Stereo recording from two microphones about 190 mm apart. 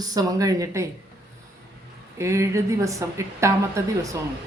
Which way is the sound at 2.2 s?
15° right (ahead or behind).